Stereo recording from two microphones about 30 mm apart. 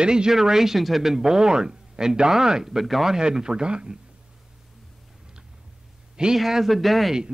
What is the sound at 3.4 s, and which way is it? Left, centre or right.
Speech, right.